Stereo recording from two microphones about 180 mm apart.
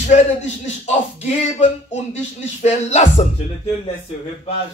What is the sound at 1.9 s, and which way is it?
Speech, 40° left (ahead or behind).